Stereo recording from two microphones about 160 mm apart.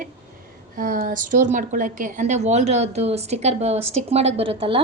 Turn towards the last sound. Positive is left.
turn(degrees=-35)  # may be behind; listen again after turning